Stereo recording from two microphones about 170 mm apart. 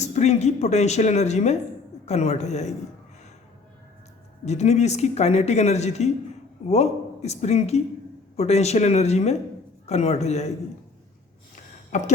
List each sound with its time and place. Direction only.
0.0 s speech: 40° left (ahead or behind)
4.4 s a man's voice: 40° left (ahead or behind)
11.5 s a sound: 45° left (ahead or behind)